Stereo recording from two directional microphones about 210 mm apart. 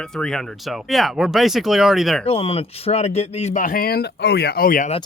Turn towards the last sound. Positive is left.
turn(degrees=40)  # may be behind; listen again after turning